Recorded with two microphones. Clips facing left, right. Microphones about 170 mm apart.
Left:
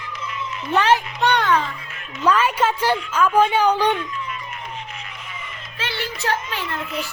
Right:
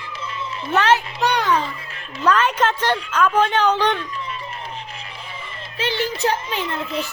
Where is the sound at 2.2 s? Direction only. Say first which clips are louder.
Even; 10° left (ahead or behind).